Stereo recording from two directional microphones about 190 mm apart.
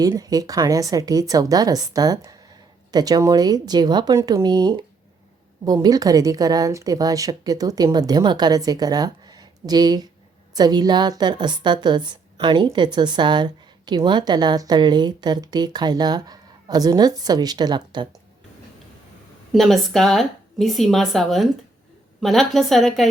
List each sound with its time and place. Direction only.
0.0 s a woman's voice: 20° right (ahead or behind)
19.5 s a woman's voice: centre (ahead or behind)